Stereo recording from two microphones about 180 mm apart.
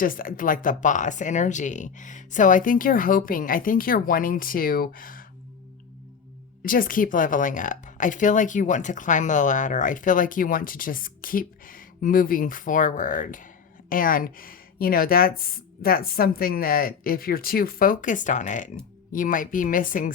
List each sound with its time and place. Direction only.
0.0 s a woman's voice: 50° left (ahead or behind)
6.6 s a woman's voice: 50° left (ahead or behind)